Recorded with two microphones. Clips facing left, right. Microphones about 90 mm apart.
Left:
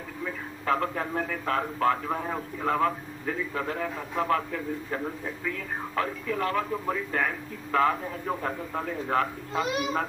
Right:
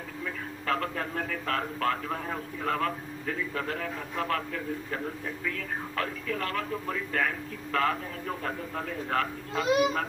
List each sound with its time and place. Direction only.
0.2 s a man's voice: 20° left (ahead or behind)